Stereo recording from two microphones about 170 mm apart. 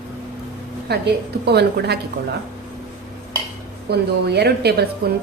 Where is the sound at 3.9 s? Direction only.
75° right (ahead or behind).